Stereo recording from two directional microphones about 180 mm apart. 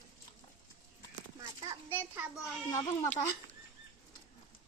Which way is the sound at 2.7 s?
15° left (ahead or behind).